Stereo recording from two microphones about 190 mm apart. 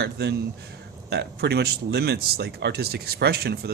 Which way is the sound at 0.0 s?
60° right (ahead or behind).